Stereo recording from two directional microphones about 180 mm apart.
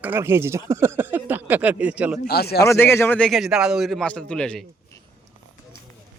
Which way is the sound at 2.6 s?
15° left (ahead or behind).